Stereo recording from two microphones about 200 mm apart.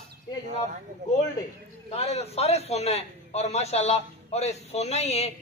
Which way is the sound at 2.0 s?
30° left (ahead or behind).